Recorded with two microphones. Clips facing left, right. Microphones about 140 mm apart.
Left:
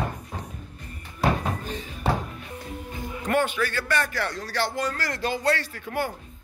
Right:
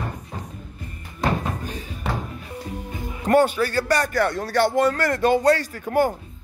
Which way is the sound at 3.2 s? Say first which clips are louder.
Right 7 dB; 35° right (ahead or behind).